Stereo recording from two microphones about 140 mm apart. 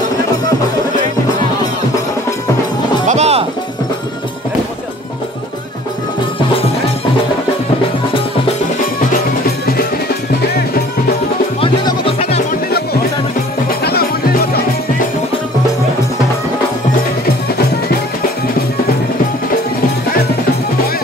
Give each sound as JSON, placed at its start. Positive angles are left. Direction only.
{"t": 3.1, "sound": "music", "side_deg": -50}
{"t": 11.6, "sound": "music", "side_deg": 45}